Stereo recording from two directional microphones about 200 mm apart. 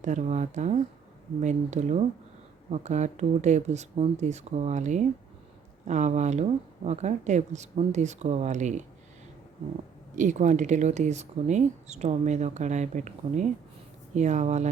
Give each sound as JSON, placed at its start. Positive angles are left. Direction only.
{"t": 0.0, "sound": "speech", "side_deg": -35}
{"t": 10.2, "sound": "speech", "side_deg": -35}